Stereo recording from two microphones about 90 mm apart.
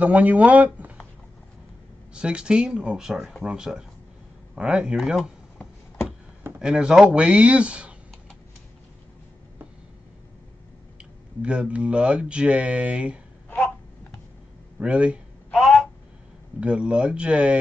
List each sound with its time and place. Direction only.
0.0 s speech: 15° right (ahead or behind)
2.1 s speech: 10° right (ahead or behind)
6.6 s speech: 10° right (ahead or behind)
11.0 s speech: 10° right (ahead or behind)
14.8 s speech: 15° right (ahead or behind)
15.5 s a sound: centre (ahead or behind)
16.5 s speech: 10° right (ahead or behind)